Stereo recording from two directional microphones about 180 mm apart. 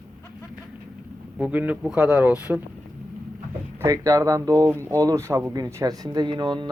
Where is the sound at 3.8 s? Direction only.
20° right (ahead or behind).